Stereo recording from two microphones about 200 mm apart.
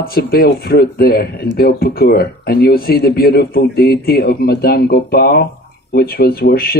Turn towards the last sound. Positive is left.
turn(degrees=50)  # may be behind; listen again after turning